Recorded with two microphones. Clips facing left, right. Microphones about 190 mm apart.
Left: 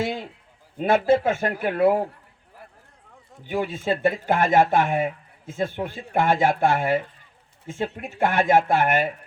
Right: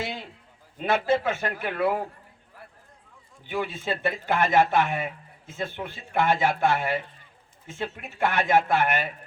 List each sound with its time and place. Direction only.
0.0 s a sound: 50° left (ahead or behind)
0.8 s speech: 50° left (ahead or behind)
3.4 s speech: 40° left (ahead or behind)